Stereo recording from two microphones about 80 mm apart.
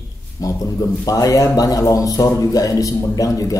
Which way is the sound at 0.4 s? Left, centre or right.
Left.